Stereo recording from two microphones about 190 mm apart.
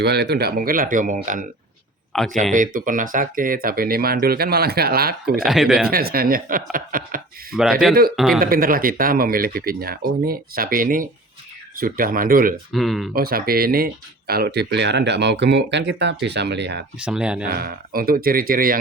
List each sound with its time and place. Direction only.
0.0 s speech: 60° right (ahead or behind)
5.5 s speech: centre (ahead or behind)
5.9 s speech: 50° right (ahead or behind)
7.5 s speech: 5° right (ahead or behind)
8.4 s speech: 50° right (ahead or behind)
12.7 s speech: centre (ahead or behind)
13.1 s speech: 50° right (ahead or behind)
17.0 s speech: 5° right (ahead or behind)
17.5 s speech: 50° right (ahead or behind)